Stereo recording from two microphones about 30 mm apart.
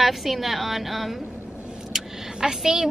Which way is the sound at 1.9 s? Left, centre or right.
Centre.